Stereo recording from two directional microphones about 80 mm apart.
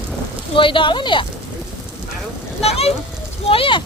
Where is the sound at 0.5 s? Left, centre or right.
Left.